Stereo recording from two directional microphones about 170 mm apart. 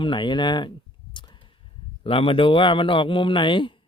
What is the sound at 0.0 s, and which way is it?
Speech, 30° left (ahead or behind).